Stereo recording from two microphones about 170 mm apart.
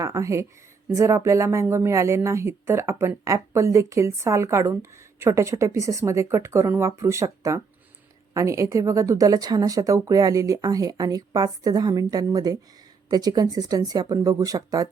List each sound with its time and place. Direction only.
0.0 s a woman's voice: 20° right (ahead or behind)